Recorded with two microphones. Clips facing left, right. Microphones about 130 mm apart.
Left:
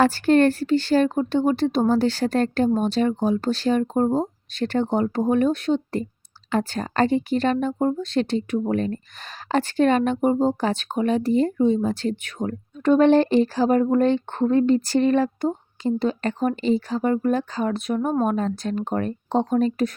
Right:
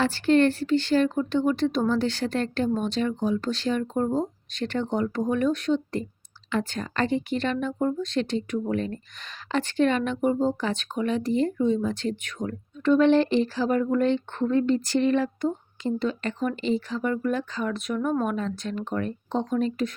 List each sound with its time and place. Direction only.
0.0 s speech: 45° left (ahead or behind)